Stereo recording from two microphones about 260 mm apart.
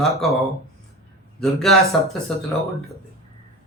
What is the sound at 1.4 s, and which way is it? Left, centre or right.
Speech, centre.